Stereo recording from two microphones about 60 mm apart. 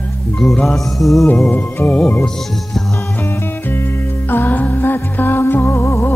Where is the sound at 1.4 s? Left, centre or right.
Left.